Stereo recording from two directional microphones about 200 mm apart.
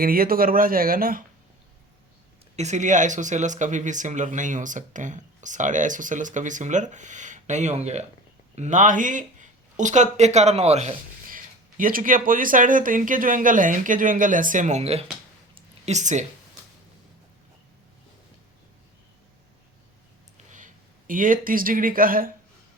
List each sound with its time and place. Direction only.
0.0 s speech: 45° right (ahead or behind)
2.6 s speech: 35° right (ahead or behind)
15.5 s a sound: 35° right (ahead or behind)
20.5 s speech: 40° right (ahead or behind)